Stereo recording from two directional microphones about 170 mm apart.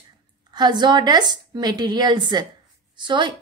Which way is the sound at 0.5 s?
25° right (ahead or behind).